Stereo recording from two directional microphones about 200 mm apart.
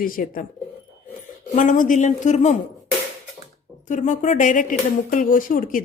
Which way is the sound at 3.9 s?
40° left (ahead or behind).